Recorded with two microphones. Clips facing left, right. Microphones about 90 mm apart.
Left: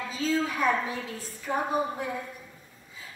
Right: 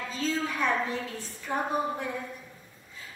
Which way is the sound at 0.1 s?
5° left (ahead or behind).